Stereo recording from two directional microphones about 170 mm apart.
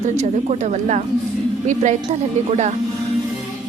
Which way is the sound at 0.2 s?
45° right (ahead or behind).